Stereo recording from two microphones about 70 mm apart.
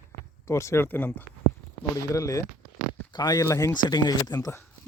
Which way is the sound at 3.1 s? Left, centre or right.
Left.